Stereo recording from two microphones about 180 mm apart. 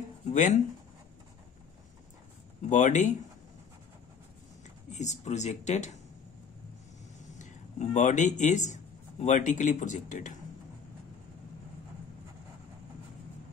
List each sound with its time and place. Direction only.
0.3 s speech: 45° left (ahead or behind)
2.7 s speech: 45° left (ahead or behind)
4.9 s speech: 40° left (ahead or behind)
7.3 s speech: 40° left (ahead or behind)